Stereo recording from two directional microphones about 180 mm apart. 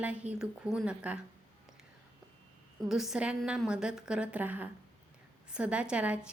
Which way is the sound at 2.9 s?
5° right (ahead or behind).